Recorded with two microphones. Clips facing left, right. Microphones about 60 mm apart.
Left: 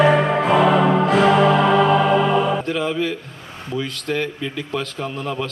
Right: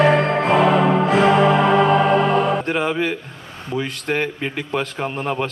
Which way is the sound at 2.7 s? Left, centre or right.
Right.